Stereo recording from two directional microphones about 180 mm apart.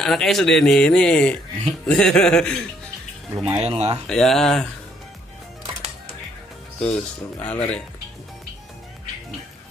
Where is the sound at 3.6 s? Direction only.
35° right (ahead or behind).